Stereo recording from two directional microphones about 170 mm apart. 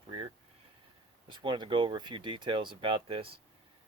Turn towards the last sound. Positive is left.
turn(degrees=-30)  # may be behind; listen again after turning